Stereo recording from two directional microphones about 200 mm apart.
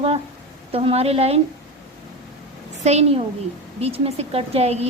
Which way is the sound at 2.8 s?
30° right (ahead or behind).